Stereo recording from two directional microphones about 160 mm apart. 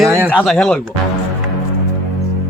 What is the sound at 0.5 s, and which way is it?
Speech, 5° left (ahead or behind).